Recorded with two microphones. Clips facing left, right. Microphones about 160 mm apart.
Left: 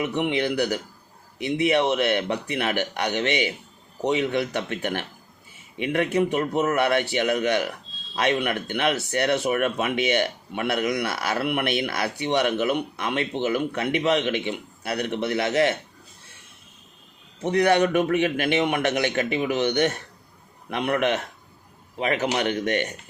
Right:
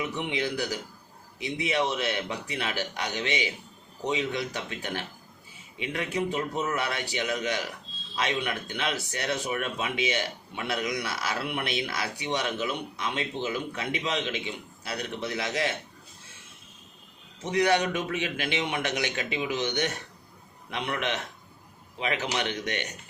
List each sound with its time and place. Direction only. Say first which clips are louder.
0.0 s speech: left 6 dB; 60° left (ahead or behind)
17.4 s speech: left 5 dB; 55° left (ahead or behind)